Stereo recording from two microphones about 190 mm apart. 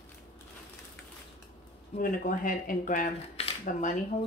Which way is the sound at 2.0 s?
45° left (ahead or behind).